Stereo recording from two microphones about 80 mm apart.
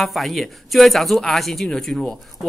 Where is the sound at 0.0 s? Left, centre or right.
Centre.